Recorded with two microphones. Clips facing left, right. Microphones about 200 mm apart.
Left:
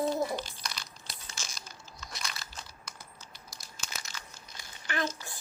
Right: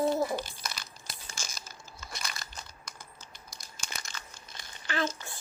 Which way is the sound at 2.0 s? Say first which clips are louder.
Right 1 dB; centre (ahead or behind).